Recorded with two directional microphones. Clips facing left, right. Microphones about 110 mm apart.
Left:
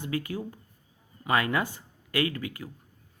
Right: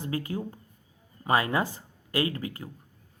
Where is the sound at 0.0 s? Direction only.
30° right (ahead or behind).